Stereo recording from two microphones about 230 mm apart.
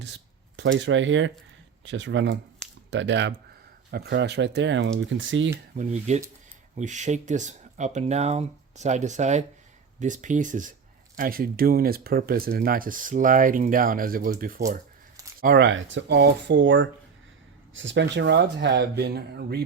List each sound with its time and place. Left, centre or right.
0.5 s speech: right
5.7 s speech: right